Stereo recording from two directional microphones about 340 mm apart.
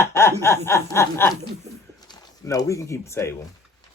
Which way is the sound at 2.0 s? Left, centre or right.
Centre.